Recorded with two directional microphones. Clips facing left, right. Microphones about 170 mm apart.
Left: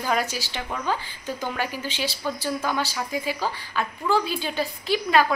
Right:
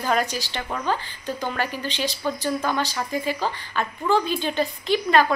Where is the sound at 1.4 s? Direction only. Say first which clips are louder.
Right 2 dB; 10° left (ahead or behind).